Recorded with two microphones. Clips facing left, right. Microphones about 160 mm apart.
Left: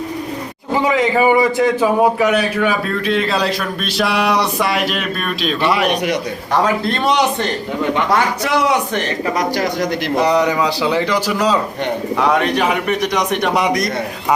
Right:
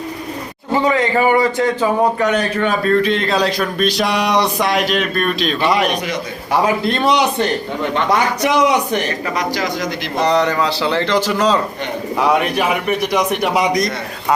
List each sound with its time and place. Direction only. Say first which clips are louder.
0.7 s a man's voice: even; 10° left (ahead or behind)
8.1 s a man's voice: right 1 dB; 15° right (ahead or behind)
9.4 s speech: left 2 dB; 55° left (ahead or behind)
10.2 s a man's voice: even; 10° left (ahead or behind)
12.4 s a man's voice: left 1 dB; 5° right (ahead or behind)